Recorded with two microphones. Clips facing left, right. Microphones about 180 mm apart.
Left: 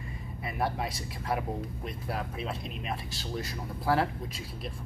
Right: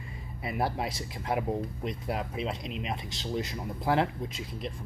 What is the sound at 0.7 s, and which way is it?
Speech, 25° right (ahead or behind).